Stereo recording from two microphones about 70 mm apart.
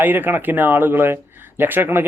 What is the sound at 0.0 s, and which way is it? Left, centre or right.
Speech, right.